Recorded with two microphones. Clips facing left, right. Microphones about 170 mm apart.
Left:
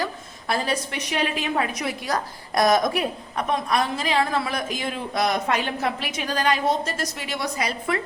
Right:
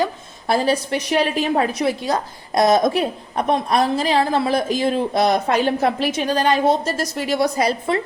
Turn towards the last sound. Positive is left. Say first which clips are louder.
# right 6 dB
turn(degrees=-35)  # may be behind; listen again after turning